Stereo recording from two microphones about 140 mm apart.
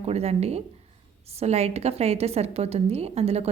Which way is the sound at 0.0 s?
45° right (ahead or behind).